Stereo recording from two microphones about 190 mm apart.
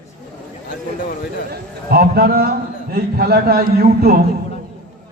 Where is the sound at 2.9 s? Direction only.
55° right (ahead or behind).